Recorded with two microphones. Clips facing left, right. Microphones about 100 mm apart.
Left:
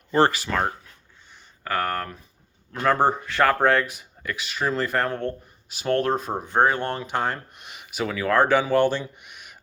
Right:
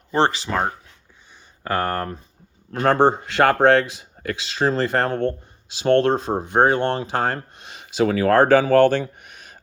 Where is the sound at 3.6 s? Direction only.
85° right.